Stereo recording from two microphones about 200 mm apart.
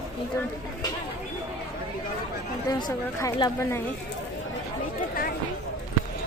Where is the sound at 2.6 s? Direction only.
20° left (ahead or behind).